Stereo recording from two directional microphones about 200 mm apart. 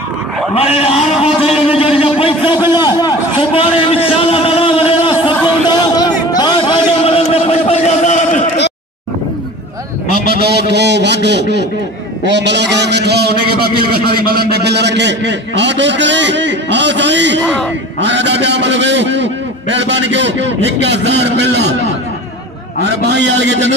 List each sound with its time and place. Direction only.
0.6 s a man's voice: 30° left (ahead or behind)
1.1 s a sound: 30° left (ahead or behind)
10.2 s a man's voice: 55° right (ahead or behind)
22.8 s a man's voice: 55° right (ahead or behind)